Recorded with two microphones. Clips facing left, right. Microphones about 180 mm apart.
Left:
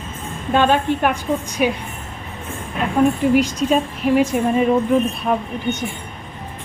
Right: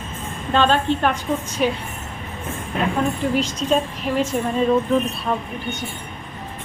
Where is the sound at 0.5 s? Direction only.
15° left (ahead or behind).